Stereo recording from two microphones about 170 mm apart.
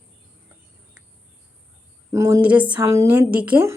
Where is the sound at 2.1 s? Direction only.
15° right (ahead or behind).